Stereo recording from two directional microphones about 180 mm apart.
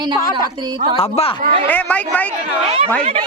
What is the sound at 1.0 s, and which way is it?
Speech, 35° left (ahead or behind).